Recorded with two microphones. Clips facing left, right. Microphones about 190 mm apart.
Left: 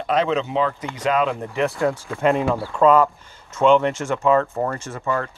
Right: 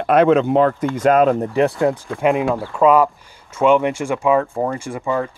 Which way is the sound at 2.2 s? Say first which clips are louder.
Right 1 dB; 10° right (ahead or behind).